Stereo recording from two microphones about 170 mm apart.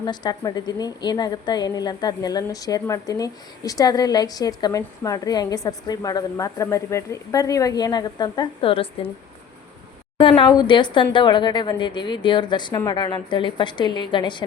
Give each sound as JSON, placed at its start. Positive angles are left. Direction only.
{"t": 0.0, "sound": "a woman's voice", "side_deg": 25}
{"t": 10.2, "sound": "a woman's voice", "side_deg": 30}